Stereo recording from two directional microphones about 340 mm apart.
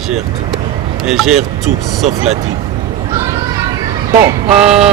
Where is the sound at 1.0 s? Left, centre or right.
Centre.